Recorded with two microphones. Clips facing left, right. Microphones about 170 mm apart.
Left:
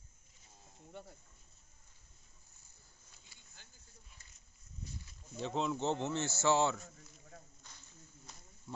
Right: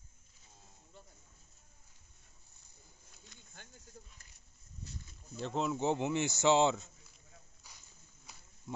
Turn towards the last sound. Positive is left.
turn(degrees=-20)  # may be behind; listen again after turning